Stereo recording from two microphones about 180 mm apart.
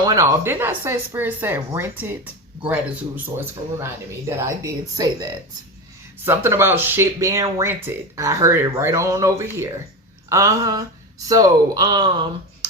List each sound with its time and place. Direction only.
0.0 s speech: 20° right (ahead or behind)